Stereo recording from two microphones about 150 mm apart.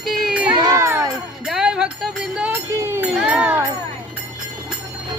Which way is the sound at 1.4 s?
5° right (ahead or behind).